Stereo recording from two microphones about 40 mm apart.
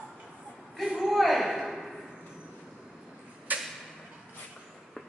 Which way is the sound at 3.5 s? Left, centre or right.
Right.